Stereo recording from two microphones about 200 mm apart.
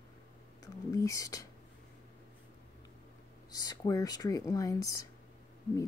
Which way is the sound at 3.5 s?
20° left (ahead or behind).